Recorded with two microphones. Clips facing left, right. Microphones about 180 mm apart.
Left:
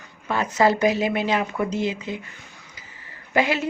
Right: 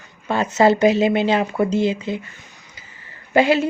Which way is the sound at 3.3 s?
30° right (ahead or behind).